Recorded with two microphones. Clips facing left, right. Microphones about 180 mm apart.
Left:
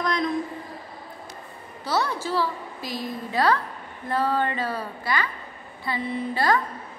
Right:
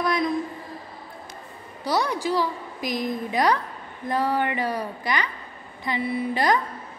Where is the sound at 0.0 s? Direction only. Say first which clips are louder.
Right 2 dB; 10° right (ahead or behind).